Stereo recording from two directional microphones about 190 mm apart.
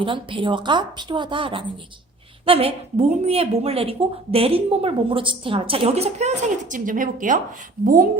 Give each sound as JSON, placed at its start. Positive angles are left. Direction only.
{"t": 0.0, "sound": "a woman's voice", "side_deg": -25}